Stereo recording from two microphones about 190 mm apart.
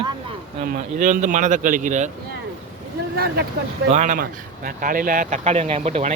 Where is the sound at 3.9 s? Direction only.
40° right (ahead or behind).